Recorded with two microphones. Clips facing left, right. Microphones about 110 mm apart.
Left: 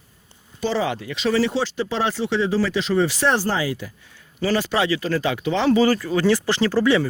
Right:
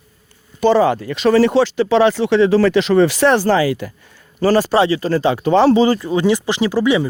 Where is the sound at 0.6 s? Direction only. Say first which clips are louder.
Right 10 dB; 50° right (ahead or behind); by 3.9 s 65° right (ahead or behind).